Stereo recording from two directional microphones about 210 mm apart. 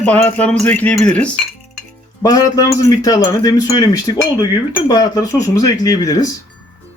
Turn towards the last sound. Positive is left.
turn(degrees=15)  # may be behind; listen again after turning